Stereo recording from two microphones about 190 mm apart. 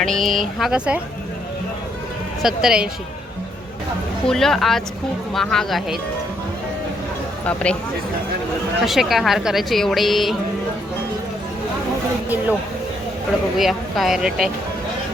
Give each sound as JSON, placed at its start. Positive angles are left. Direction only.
{"t": 0.0, "sound": "a woman's voice", "side_deg": 0}
{"t": 2.4, "sound": "a woman's voice", "side_deg": -5}
{"t": 4.3, "sound": "a woman's voice", "side_deg": 0}
{"t": 7.4, "sound": "a woman's voice", "side_deg": 5}
{"t": 8.9, "sound": "a woman's voice", "side_deg": 0}
{"t": 13.6, "sound": "a woman's voice", "side_deg": 0}